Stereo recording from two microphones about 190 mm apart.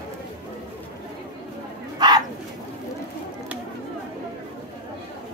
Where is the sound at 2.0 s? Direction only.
20° right (ahead or behind).